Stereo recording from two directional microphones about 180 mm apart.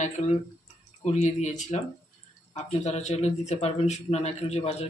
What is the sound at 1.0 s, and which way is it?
A man's voice, 40° left (ahead or behind).